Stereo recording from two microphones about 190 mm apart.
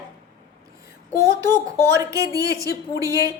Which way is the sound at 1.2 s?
20° right (ahead or behind).